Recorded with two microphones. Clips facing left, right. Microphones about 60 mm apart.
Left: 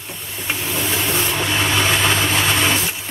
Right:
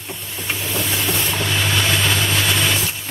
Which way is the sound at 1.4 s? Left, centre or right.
Centre.